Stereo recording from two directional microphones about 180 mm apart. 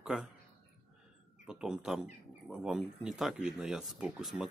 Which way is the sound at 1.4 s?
5° right (ahead or behind).